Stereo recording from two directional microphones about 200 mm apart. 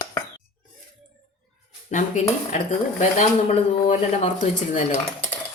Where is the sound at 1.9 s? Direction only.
35° left (ahead or behind).